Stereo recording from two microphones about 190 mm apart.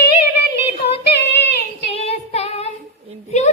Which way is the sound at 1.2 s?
60° left (ahead or behind).